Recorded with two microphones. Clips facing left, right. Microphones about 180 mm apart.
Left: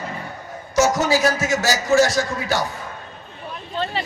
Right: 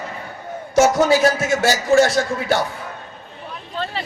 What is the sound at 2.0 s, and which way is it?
Speech, 30° right (ahead or behind).